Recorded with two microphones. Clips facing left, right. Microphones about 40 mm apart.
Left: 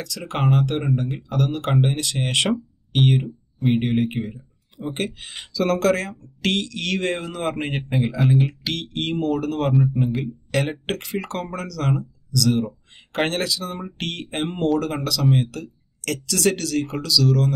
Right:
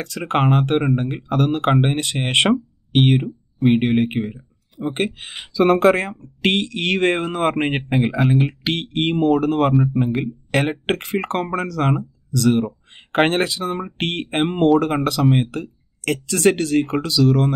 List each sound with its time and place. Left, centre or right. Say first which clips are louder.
0.0 s speech: right 5 dB; right
9.7 s speech: right 2 dB; centre
9.9 s speech: right 3 dB; right